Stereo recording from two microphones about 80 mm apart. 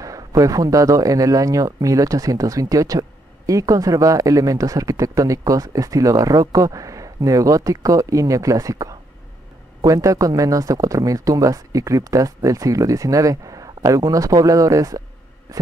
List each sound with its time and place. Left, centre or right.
0.0 s speech: right
15.5 s heart sounds: right